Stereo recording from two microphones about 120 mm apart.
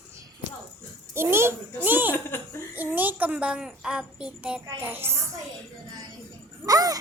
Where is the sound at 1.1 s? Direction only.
20° right (ahead or behind).